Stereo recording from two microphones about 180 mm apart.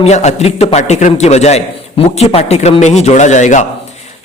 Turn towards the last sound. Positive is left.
turn(degrees=40)  # may be behind; listen again after turning